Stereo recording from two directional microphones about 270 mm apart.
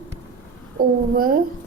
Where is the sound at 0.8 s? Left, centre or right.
Right.